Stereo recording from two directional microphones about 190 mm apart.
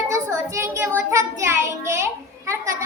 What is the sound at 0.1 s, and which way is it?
Child singing, 15° right (ahead or behind).